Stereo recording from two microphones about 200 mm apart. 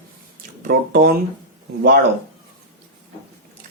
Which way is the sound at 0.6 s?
50° right (ahead or behind).